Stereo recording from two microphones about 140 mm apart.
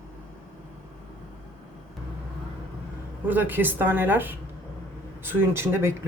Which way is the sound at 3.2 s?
10° right (ahead or behind).